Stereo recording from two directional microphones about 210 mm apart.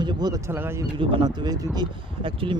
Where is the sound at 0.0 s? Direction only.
20° right (ahead or behind).